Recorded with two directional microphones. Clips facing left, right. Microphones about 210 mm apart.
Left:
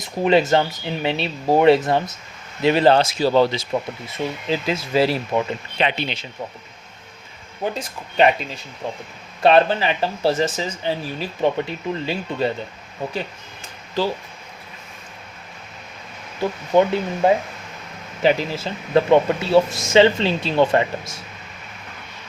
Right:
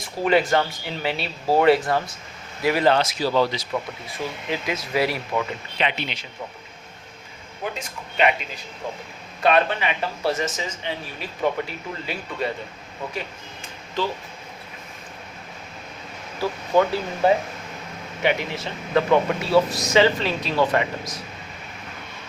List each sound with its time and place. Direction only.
0.0 s speech: 20° left (ahead or behind)
7.6 s speech: 35° left (ahead or behind)
9.4 s speech: 30° left (ahead or behind)
16.4 s speech: 20° left (ahead or behind)